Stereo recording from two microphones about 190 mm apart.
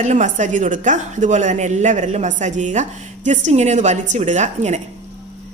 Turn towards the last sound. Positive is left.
turn(degrees=-40)  # may be behind; listen again after turning